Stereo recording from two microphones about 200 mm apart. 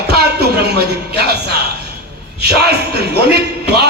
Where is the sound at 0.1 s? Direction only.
55° right (ahead or behind).